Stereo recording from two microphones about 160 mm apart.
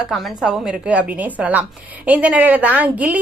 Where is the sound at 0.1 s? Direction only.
Centre (ahead or behind).